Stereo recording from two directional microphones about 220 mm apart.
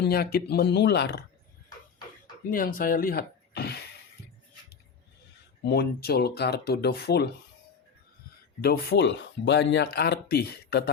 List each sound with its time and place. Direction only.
0.0 s speech: 45° left (ahead or behind)
2.5 s speech: 40° left (ahead or behind)
5.6 s speech: 50° left (ahead or behind)
8.6 s speech: 45° left (ahead or behind)